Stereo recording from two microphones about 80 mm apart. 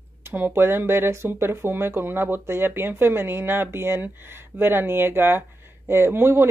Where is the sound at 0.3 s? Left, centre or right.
Right.